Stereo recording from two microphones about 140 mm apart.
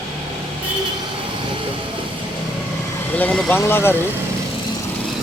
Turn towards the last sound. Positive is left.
turn(degrees=15)  # may be behind; listen again after turning